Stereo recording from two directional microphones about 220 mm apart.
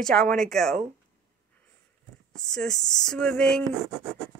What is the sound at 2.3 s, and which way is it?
Speech, 5° left (ahead or behind).